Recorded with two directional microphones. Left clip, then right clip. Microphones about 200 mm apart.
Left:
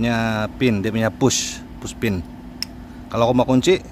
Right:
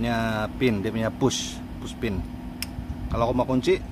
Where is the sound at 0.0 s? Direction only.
45° left (ahead or behind).